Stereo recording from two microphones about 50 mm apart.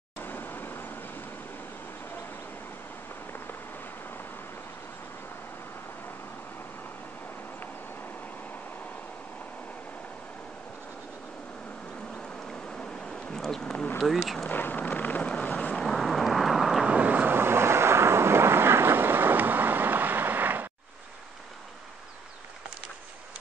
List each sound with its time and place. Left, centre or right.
0.2 s vehicle: left
12.7 s bee: centre
14.0 s speech: centre
14.5 s a sound: left
14.8 s vehicle: left
15.8 s vehicle: centre
16.8 s vehicle: right
17.4 s vehicle: right